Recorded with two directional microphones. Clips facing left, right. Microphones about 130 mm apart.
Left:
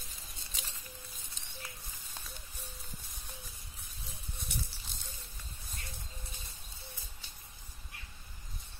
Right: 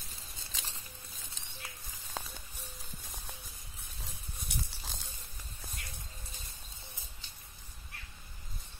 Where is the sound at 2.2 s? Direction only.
90° right.